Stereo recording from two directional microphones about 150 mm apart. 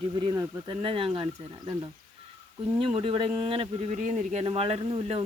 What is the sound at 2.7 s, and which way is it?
Speech, 35° right (ahead or behind).